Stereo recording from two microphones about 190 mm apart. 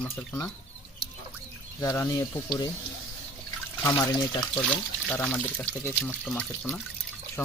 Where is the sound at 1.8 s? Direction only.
15° left (ahead or behind).